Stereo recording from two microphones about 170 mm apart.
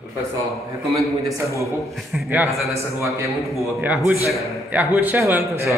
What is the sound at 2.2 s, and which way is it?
Speech, 15° right (ahead or behind).